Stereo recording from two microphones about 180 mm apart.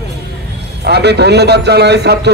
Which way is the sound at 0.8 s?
65° right (ahead or behind).